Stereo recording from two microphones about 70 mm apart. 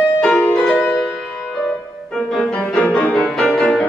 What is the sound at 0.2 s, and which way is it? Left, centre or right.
Music, centre.